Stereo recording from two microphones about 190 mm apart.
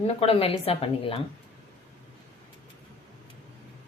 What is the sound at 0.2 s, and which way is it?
Speech, 30° left (ahead or behind).